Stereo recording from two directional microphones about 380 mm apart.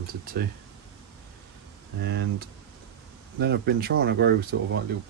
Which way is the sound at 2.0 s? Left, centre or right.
Right.